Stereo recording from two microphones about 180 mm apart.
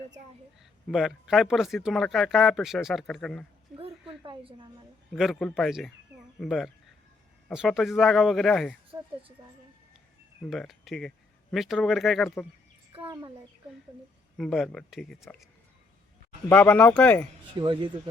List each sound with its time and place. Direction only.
0.6 s speech: centre (ahead or behind)
4.2 s a woman's voice: 25° right (ahead or behind)
5.1 s speech: centre (ahead or behind)
8.9 s speech: 20° right (ahead or behind)
10.4 s speech: centre (ahead or behind)
12.9 s a child's voice: 30° right (ahead or behind)
14.3 s speech: centre (ahead or behind)
16.5 s speech: 5° left (ahead or behind)
17.6 s a woman's voice: 25° right (ahead or behind)